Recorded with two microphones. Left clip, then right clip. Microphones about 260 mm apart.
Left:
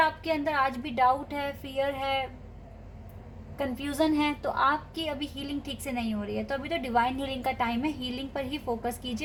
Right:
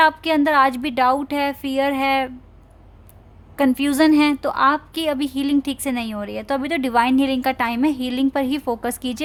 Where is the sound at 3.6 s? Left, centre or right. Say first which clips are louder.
Right 11 dB; right.